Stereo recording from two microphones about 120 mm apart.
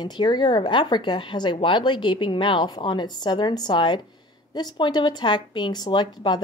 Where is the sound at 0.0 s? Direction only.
35° left (ahead or behind).